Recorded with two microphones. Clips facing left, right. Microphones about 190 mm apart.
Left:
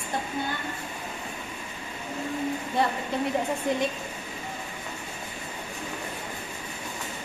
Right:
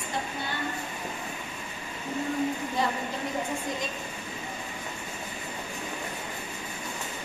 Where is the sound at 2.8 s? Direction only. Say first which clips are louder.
Left 3 dB; 60° left (ahead or behind).